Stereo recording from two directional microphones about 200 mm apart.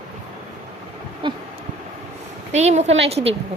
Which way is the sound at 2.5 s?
35° right (ahead or behind).